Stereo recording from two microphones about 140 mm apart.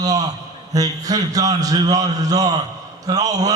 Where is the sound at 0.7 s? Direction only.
25° right (ahead or behind).